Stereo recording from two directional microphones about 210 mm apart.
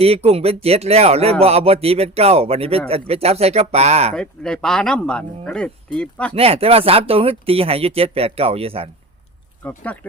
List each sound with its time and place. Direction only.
0.0 s speech: 30° right (ahead or behind)
4.1 s speech: 5° left (ahead or behind)
6.3 s speech: 30° right (ahead or behind)
9.6 s speech: 10° left (ahead or behind)